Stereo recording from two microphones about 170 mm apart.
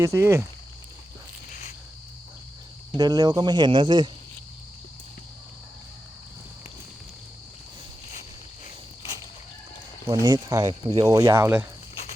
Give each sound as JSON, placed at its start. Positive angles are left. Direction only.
{"t": 0.0, "sound": "speech", "side_deg": -15}
{"t": 1.5, "sound": "a sound", "side_deg": 50}
{"t": 3.0, "sound": "speech", "side_deg": -20}
{"t": 10.1, "sound": "speech", "side_deg": -25}